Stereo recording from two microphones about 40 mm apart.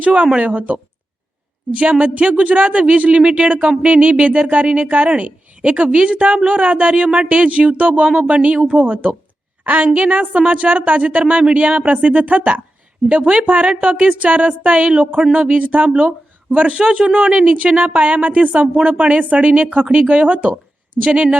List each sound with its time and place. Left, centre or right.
0.0 s a woman's voice: right